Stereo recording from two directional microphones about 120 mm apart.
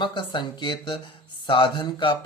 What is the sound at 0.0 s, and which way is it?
A man's voice, 45° left (ahead or behind).